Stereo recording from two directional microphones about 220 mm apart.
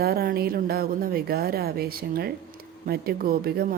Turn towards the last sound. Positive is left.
turn(degrees=-45)  # may be behind; listen again after turning